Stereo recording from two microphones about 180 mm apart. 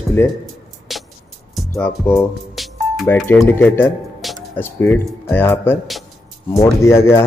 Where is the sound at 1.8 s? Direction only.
5° left (ahead or behind).